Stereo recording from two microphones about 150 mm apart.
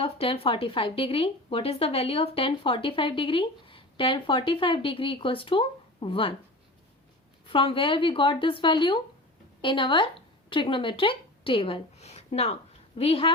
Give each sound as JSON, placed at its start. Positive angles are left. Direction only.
{"t": 0.0, "sound": "a woman's voice", "side_deg": 40}
{"t": 7.5, "sound": "a woman's voice", "side_deg": 35}